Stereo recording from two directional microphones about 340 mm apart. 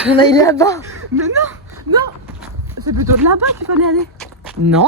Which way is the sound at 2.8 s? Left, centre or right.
Right.